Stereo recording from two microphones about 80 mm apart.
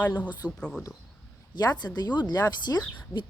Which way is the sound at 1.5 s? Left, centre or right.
Left.